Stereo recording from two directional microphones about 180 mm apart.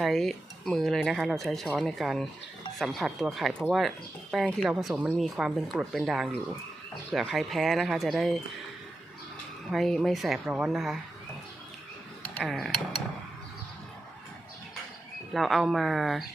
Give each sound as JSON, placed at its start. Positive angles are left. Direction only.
{"t": 0.0, "sound": "speech", "side_deg": 0}
{"t": 9.7, "sound": "speech", "side_deg": 0}
{"t": 12.4, "sound": "speech", "side_deg": 0}
{"t": 15.3, "sound": "speech", "side_deg": 0}